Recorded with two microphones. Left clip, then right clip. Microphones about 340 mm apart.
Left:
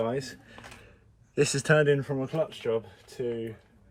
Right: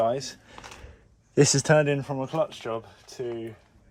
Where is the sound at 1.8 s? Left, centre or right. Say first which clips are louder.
Left 1 dB; right.